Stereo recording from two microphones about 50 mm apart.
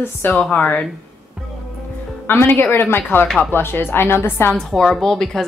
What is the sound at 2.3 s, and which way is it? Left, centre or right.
A woman's voice, left.